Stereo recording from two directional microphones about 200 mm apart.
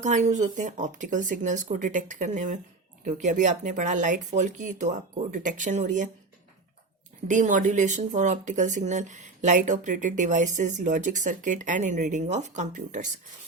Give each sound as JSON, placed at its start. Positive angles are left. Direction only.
{"t": 0.0, "sound": "speech", "side_deg": -35}
{"t": 7.3, "sound": "speech", "side_deg": -40}